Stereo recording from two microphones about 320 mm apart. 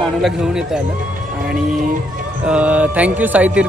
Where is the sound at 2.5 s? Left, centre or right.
Centre.